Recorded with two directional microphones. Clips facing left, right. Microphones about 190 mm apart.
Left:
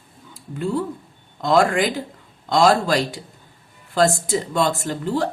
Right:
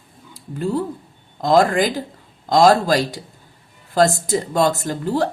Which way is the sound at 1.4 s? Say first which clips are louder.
Right 2 dB; 35° right (ahead or behind).